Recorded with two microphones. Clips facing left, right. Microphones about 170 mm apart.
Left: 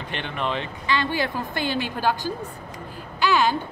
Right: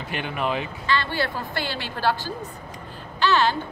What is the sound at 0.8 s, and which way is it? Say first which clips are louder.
A woman's voice: left 1 dB; 15° left (ahead or behind).